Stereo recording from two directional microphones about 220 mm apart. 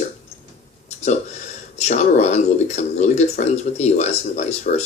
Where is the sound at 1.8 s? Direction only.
30° left (ahead or behind).